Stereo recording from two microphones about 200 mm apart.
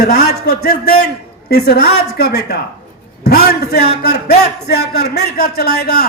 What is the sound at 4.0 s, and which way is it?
A man's voice, 50° left (ahead or behind).